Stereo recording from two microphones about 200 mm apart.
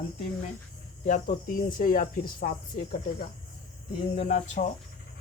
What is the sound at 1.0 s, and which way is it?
Speech, 40° left (ahead or behind).